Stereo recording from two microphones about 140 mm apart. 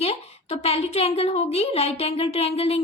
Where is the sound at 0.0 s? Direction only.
45° left (ahead or behind).